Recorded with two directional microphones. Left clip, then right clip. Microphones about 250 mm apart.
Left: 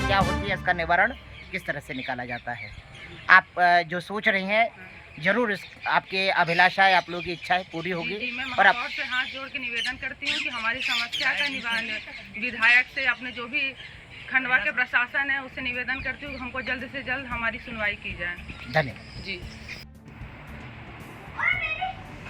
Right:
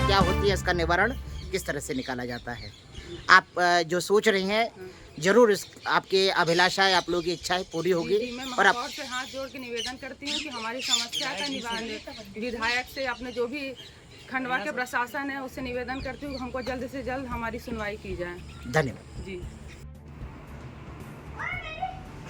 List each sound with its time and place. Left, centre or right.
0.1 s speech: right